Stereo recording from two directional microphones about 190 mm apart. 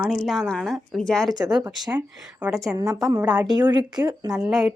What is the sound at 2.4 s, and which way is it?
A woman's voice, 10° right (ahead or behind).